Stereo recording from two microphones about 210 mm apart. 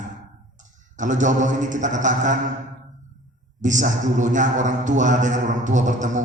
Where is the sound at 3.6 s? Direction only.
35° right (ahead or behind).